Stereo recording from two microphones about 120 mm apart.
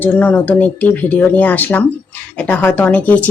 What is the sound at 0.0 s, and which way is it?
Speech, 15° left (ahead or behind).